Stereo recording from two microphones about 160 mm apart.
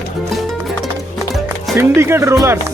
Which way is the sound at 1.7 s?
15° right (ahead or behind).